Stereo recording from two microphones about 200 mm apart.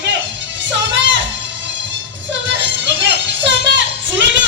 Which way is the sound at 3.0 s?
65° right (ahead or behind).